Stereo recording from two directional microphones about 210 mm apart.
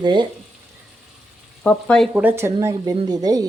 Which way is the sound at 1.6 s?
5° left (ahead or behind).